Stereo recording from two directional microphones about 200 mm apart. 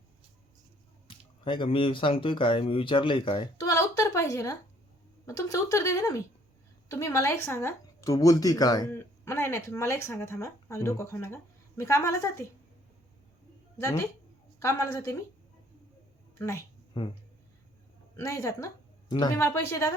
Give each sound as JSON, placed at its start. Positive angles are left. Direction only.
{"t": 1.0, "sound": "speech", "side_deg": 25}
{"t": 13.8, "sound": "speech", "side_deg": 15}
{"t": 16.4, "sound": "a woman's voice", "side_deg": 15}
{"t": 18.2, "sound": "speech", "side_deg": 15}